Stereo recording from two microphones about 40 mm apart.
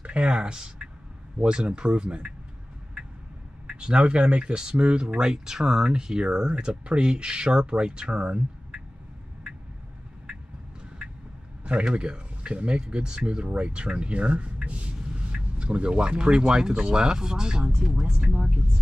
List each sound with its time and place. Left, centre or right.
0.0 s speech: right
3.6 s a sound: right
4.0 s speech: right
11.6 s speech: right
15.0 s a sound: right
15.3 s speech: right
18.3 s speech: right